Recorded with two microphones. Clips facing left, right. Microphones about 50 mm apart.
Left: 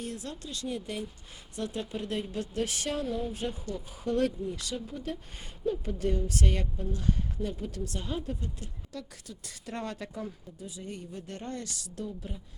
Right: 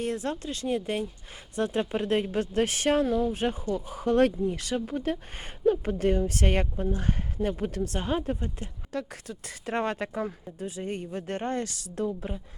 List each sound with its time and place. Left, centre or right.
0.0 s speech: right